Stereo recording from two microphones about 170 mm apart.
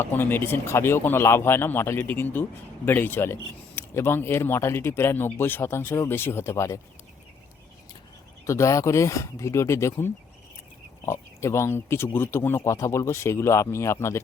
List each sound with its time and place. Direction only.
0.0 s speech: 10° left (ahead or behind)
8.4 s speech: 20° left (ahead or behind)